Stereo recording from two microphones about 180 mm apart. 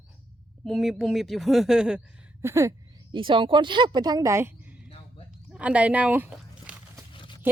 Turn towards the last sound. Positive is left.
turn(degrees=25)  # may be behind; listen again after turning